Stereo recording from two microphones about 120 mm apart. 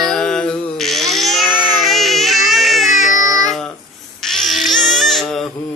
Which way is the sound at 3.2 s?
30° right (ahead or behind).